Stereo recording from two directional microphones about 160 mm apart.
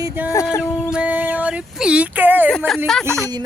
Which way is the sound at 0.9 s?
10° right (ahead or behind).